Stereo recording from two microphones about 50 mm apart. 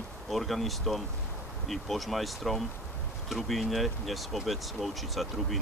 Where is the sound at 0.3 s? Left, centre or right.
Centre.